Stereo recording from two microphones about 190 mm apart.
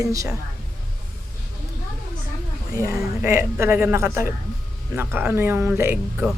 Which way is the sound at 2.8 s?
15° right (ahead or behind).